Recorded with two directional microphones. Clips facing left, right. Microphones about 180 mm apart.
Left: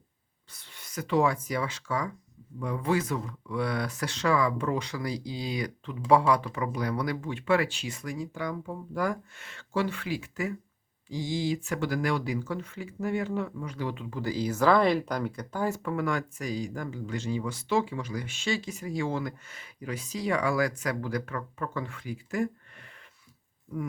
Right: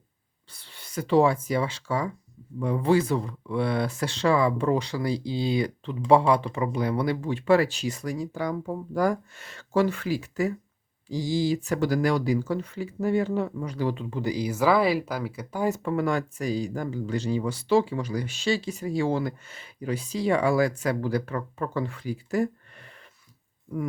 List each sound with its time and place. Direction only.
0.5 s speech: 30° right (ahead or behind)
14.2 s speech: 15° right (ahead or behind)
15.8 s speech: 30° right (ahead or behind)